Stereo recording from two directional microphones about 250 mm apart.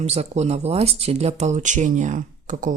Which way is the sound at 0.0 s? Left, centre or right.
Right.